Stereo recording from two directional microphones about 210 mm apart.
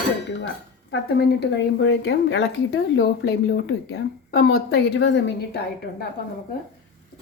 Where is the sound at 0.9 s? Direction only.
55° left (ahead or behind).